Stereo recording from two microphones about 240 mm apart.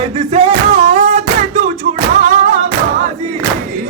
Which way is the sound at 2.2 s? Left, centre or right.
Right.